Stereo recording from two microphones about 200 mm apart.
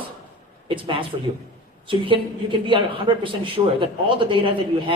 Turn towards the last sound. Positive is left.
turn(degrees=-25)  # may be behind; listen again after turning